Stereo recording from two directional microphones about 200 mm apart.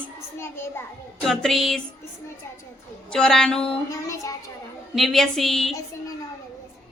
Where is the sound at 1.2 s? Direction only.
Centre (ahead or behind).